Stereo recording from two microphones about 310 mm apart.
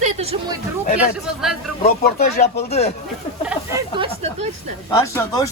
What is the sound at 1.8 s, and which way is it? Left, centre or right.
Speech, left.